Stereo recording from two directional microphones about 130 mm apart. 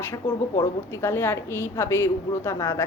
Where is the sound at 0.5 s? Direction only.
20° left (ahead or behind).